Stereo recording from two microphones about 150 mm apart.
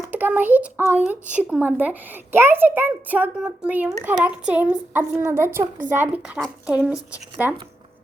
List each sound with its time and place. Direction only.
0.1 s a child's voice: 10° right (ahead or behind)